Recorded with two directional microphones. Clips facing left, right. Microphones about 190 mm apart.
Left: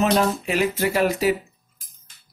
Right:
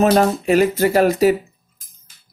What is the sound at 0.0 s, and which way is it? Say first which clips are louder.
Speech: right 5 dB; 45° right (ahead or behind).